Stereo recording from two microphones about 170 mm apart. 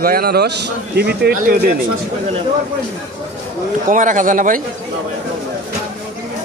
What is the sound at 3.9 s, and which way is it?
Speech, 50° right (ahead or behind).